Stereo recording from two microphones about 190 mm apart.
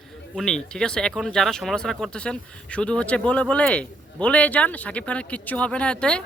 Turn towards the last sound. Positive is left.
turn(degrees=5)  # may be behind; listen again after turning